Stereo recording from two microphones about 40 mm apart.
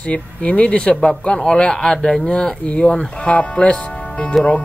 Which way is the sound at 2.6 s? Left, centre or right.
Left.